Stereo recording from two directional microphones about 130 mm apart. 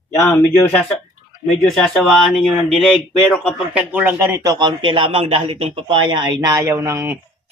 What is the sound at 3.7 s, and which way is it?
Speech, 10° right (ahead or behind).